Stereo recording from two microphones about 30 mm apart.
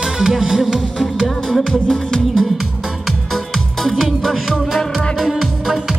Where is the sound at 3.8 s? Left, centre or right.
Centre.